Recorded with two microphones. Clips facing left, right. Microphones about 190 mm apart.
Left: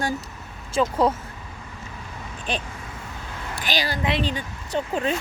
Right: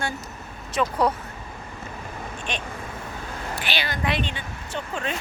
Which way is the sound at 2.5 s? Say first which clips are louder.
Left 4 dB; 35° left (ahead or behind).